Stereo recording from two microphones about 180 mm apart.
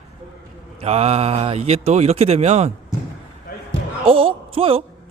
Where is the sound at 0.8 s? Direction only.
35° right (ahead or behind).